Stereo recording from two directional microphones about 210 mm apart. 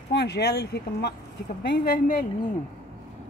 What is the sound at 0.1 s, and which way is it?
Speech, 55° left (ahead or behind).